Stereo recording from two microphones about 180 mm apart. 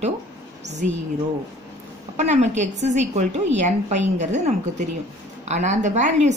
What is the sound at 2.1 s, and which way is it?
A woman's voice, 40° right (ahead or behind).